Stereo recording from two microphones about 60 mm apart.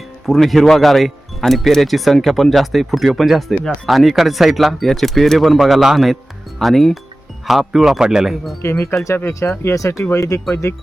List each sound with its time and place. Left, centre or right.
0.3 s speech: centre
8.6 s speech: left
10.5 s speech: left